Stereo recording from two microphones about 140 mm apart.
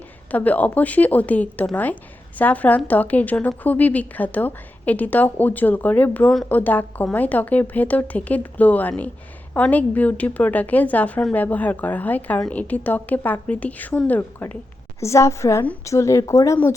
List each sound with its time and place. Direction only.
0.3 s a woman's voice: 10° left (ahead or behind)